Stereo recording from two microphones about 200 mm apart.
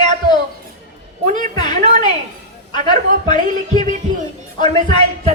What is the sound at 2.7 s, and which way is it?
Speech, 20° left (ahead or behind).